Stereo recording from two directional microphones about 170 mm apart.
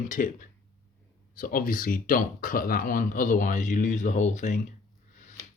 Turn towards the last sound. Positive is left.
turn(degrees=45)  # may be behind; listen again after turning